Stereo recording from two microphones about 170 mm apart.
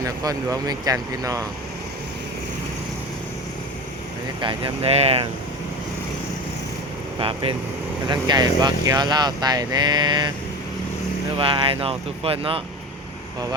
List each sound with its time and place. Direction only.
0.0 s speech: 20° right (ahead or behind)
4.4 s speech: 30° right (ahead or behind)
7.2 s speech: 30° right (ahead or behind)
11.3 s speech: 30° right (ahead or behind)